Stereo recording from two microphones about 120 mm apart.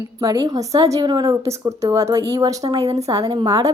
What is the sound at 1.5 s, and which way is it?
Speech, 25° right (ahead or behind).